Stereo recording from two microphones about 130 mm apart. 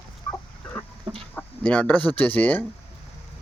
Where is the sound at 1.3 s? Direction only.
10° left (ahead or behind).